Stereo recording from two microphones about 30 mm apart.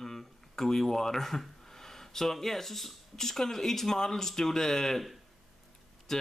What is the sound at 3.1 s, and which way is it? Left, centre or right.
Speech, centre.